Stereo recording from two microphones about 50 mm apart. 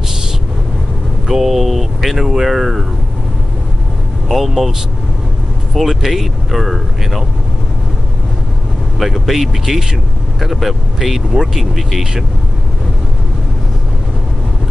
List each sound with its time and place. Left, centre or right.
1.2 s speech: centre
4.3 s speech: centre
5.8 s speech: centre
9.0 s speech: centre